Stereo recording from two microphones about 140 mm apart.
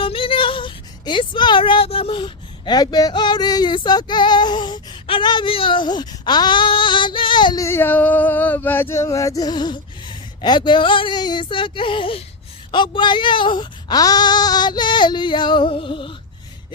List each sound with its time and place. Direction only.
0.0 s speech: 40° left (ahead or behind)
7.6 s male singing: 15° left (ahead or behind); by 12.2 s 40° left (ahead or behind)
12.7 s speech: 35° left (ahead or behind)